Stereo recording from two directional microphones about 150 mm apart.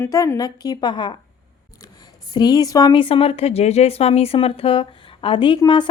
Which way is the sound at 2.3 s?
25° left (ahead or behind).